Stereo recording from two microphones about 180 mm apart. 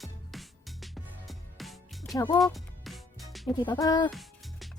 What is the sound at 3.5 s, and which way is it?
Speech, 25° left (ahead or behind).